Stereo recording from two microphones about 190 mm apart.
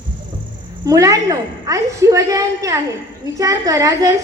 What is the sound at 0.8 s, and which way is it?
A woman's voice, 15° right (ahead or behind).